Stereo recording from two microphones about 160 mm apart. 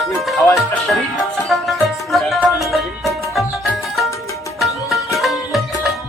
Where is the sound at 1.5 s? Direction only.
Centre (ahead or behind).